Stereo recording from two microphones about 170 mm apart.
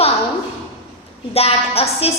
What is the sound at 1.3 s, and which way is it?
Speech, 35° left (ahead or behind).